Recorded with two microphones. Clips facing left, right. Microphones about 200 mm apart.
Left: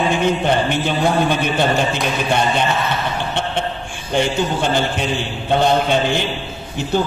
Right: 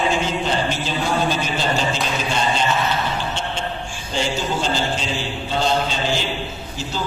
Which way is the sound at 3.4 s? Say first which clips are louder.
Left 5 dB; 60° left (ahead or behind).